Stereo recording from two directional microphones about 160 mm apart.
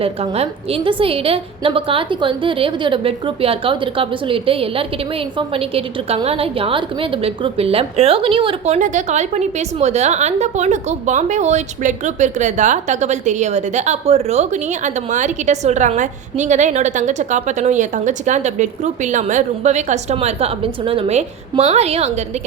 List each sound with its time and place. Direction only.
0.0 s a woman's voice: 35° right (ahead or behind)